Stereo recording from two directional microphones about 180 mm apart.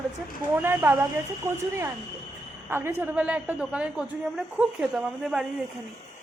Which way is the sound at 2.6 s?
10° right (ahead or behind).